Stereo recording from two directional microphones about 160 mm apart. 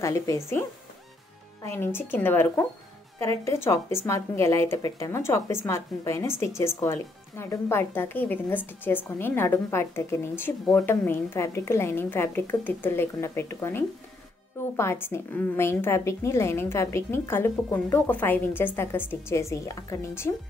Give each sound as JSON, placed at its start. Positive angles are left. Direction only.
{"t": 0.0, "sound": "speech", "side_deg": 20}